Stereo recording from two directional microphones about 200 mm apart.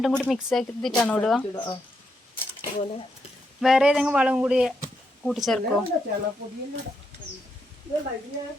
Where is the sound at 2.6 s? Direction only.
25° left (ahead or behind).